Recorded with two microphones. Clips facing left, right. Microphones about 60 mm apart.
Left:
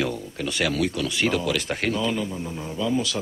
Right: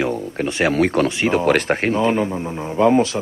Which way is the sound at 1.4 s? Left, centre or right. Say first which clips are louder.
Right 9 dB; right.